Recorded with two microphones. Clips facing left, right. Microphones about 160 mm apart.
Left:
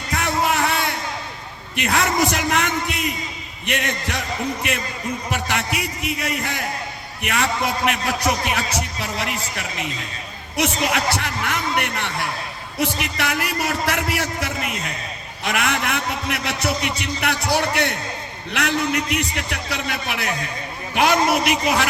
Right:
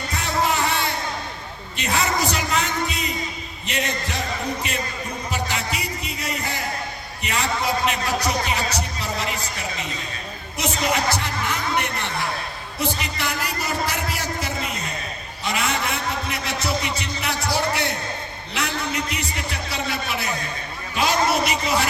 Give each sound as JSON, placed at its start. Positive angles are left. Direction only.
{"t": 0.1, "sound": "music", "side_deg": 65}
{"t": 1.7, "sound": "a man's voice", "side_deg": 65}
{"t": 5.3, "sound": "music", "side_deg": 60}
{"t": 7.2, "sound": "a man's voice", "side_deg": 60}